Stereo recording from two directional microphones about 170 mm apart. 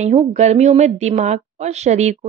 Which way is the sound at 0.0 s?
40° right (ahead or behind).